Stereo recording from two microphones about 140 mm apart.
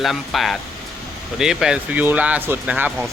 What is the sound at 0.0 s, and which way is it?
Speech, centre (ahead or behind).